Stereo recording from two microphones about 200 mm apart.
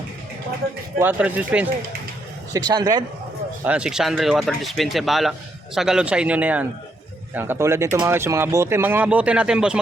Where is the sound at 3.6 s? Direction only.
5° right (ahead or behind).